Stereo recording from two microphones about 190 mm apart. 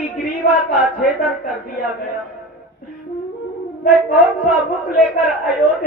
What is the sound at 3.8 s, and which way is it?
Speech, 45° left (ahead or behind).